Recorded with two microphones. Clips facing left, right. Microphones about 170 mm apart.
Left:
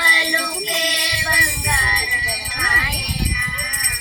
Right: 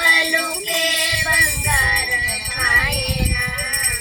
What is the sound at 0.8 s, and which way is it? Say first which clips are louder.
Music: right 1 dB; 55° right (ahead or behind).